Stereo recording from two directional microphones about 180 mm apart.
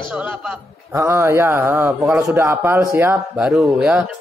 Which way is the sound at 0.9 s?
15° right (ahead or behind).